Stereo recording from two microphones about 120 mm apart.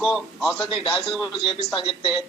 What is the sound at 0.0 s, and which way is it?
Speech, centre (ahead or behind).